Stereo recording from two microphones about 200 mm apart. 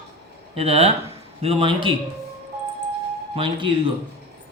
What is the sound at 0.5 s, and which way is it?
Speech, 30° right (ahead or behind).